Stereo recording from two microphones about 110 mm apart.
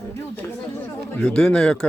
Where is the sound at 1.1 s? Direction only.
5° left (ahead or behind).